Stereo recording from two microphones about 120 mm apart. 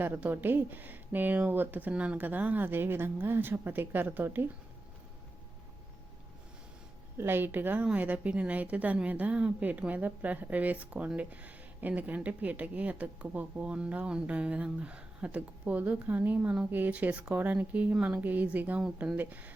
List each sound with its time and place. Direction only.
0.0 s a woman's voice: 15° right (ahead or behind)
7.2 s a woman's voice: 20° right (ahead or behind)